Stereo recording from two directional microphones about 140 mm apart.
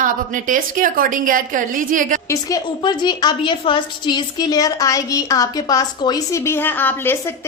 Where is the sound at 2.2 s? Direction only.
25° left (ahead or behind).